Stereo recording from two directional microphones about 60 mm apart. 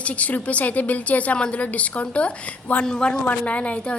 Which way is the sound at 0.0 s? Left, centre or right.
Left.